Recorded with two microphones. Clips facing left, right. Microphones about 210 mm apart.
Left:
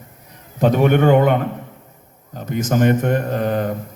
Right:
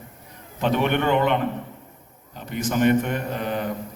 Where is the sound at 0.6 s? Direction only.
45° left (ahead or behind).